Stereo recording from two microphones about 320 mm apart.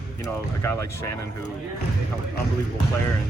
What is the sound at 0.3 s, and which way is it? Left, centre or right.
Speech, centre.